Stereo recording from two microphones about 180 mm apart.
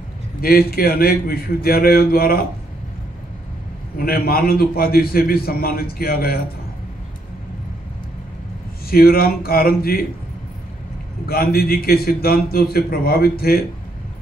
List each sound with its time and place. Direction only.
0.4 s a man's voice: 55° left (ahead or behind)
3.9 s a man's voice: 55° left (ahead or behind)
8.9 s a man's voice: 55° left (ahead or behind)
11.2 s a man's voice: 55° left (ahead or behind)